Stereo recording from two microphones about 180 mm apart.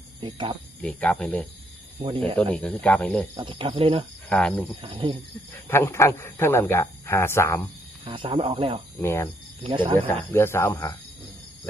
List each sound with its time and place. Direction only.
0.2 s speech: 25° right (ahead or behind)
0.8 s speech: 10° left (ahead or behind)
2.0 s speech: 30° right (ahead or behind)
2.3 s speech: 5° left (ahead or behind)
3.3 s speech: 30° right (ahead or behind)
4.3 s cricket: 5° left (ahead or behind)
4.8 s speech: 30° right (ahead or behind)
5.6 s speech: 15° left (ahead or behind)
8.0 s speech: 30° right (ahead or behind)
9.0 s speech: 15° left (ahead or behind)
9.6 s speech: 25° right (ahead or behind)
10.3 s speech: 15° left (ahead or behind)